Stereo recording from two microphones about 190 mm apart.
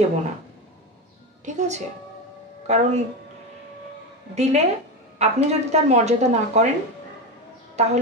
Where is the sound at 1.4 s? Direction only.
40° right (ahead or behind).